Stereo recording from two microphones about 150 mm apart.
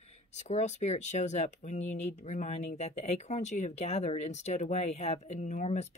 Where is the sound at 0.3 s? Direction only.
50° left (ahead or behind).